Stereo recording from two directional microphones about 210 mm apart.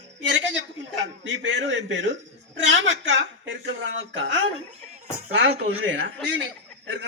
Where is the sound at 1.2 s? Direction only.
60° right (ahead or behind).